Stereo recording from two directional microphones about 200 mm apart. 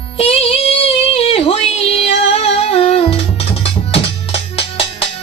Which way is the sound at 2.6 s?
30° left (ahead or behind).